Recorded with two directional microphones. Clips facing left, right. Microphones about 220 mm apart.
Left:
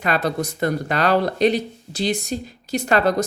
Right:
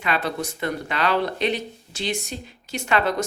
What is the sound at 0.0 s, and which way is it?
Speech, 40° left (ahead or behind).